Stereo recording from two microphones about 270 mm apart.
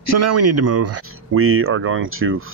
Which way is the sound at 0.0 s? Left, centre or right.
Right.